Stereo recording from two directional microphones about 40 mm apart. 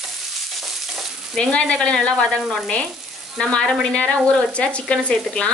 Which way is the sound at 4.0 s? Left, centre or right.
Left.